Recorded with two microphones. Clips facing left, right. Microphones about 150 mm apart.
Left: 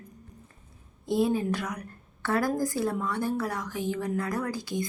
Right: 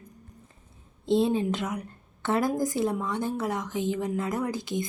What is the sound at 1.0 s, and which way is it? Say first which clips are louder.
A woman's voice: right 2 dB; 25° right (ahead or behind).